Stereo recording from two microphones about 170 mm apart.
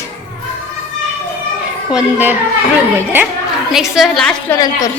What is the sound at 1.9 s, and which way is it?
Speech, 5° right (ahead or behind).